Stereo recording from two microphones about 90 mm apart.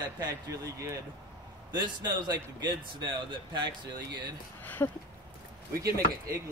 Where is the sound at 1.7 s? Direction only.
55° right (ahead or behind).